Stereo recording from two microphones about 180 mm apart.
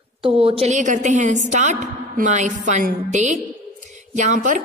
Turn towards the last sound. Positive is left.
turn(degrees=-45)  # may be behind; listen again after turning